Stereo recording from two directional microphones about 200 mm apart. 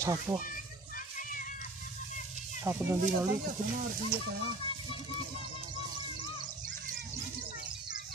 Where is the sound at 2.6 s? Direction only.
10° right (ahead or behind).